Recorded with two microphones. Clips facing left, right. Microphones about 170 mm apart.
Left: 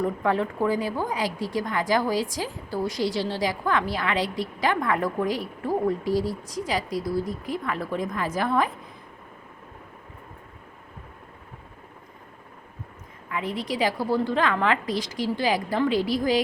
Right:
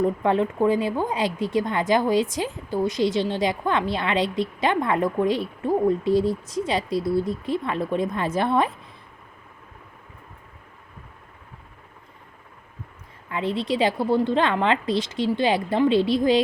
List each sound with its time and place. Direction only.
0.0 s speech: 25° right (ahead or behind)
13.3 s speech: 25° right (ahead or behind)